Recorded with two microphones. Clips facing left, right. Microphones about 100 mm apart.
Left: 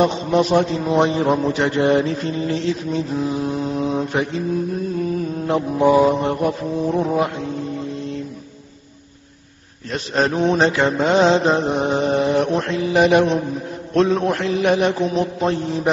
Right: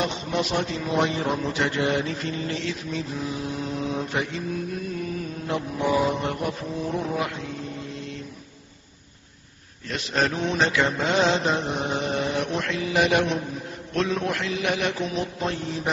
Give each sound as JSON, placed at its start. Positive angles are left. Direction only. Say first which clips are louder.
{"t": 0.0, "sound": "a man's voice", "louder": "left 9 dB", "side_deg": 35}
{"t": 5.5, "sound": "a man's voice", "louder": "left 9 dB", "side_deg": 35}
{"t": 9.8, "sound": "a man's voice", "louder": "left 5 dB", "side_deg": 35}